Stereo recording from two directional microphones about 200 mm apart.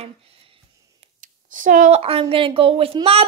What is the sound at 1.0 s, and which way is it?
Speech, 40° right (ahead or behind).